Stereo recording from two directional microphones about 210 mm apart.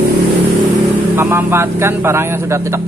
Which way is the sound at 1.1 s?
10° right (ahead or behind).